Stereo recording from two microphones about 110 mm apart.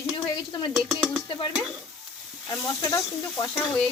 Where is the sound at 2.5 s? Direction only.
35° left (ahead or behind).